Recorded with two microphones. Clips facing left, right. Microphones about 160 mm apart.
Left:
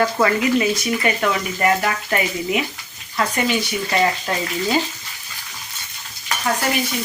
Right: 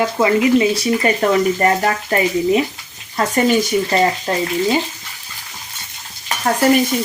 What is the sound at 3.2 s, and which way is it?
Speech, 45° right (ahead or behind).